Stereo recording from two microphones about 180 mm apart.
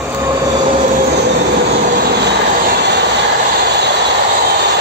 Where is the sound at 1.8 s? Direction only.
65° right (ahead or behind).